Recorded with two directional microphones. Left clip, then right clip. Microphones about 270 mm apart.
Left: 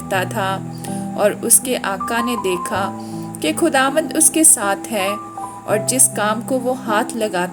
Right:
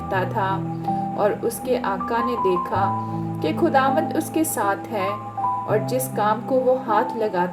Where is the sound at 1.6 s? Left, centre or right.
Left.